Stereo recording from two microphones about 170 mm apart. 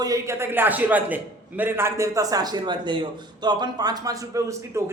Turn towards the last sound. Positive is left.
turn(degrees=-20)  # may be behind; listen again after turning